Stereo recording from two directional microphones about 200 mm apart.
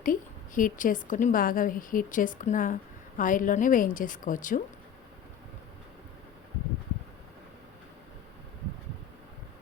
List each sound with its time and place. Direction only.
0.0 s a woman's voice: 40° left (ahead or behind)